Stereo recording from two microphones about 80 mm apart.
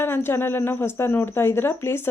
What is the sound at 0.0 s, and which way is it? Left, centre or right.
Speech, left.